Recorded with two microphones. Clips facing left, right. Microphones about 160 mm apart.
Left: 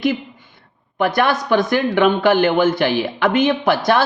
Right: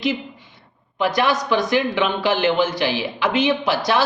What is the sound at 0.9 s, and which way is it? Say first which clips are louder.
Speech: left 2 dB; 55° left (ahead or behind).